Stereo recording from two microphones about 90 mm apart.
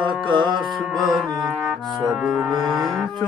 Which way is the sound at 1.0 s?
Centre (ahead or behind).